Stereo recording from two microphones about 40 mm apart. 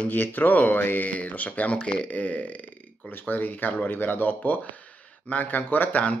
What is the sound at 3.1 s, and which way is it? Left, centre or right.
Speech, left.